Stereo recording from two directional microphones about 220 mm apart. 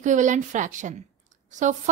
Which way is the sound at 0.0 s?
35° right (ahead or behind).